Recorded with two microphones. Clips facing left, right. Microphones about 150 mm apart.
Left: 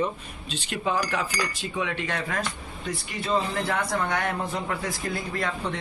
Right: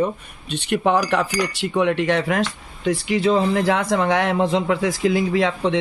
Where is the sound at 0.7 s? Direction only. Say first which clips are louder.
Right 9 dB; 70° right (ahead or behind).